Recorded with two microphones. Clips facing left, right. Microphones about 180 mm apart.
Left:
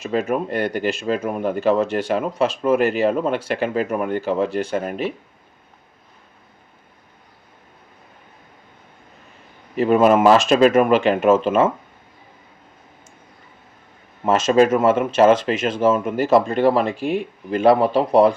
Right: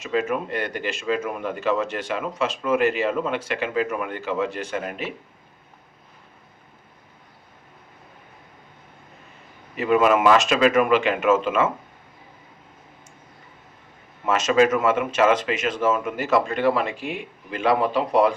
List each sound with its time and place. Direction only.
0.2 s speech: 50° left (ahead or behind); by 5.0 s 35° left (ahead or behind)
9.7 s speech: 35° left (ahead or behind)
14.3 s speech: 35° left (ahead or behind)